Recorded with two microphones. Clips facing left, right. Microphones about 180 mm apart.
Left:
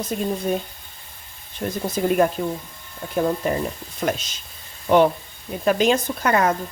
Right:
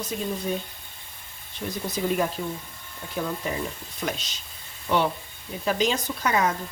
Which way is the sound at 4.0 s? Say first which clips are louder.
Left 7 dB; 50° left (ahead or behind).